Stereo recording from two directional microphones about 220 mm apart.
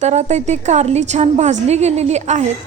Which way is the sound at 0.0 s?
30° right (ahead or behind).